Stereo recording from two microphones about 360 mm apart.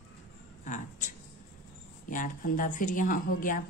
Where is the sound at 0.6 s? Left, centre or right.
Left.